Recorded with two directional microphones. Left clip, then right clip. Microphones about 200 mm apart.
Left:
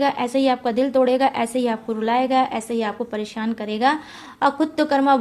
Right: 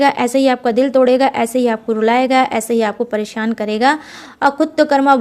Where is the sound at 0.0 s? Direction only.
30° right (ahead or behind).